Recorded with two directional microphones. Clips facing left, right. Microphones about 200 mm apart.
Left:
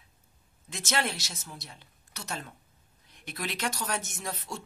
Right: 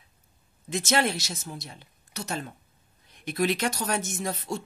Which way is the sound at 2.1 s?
40° right (ahead or behind).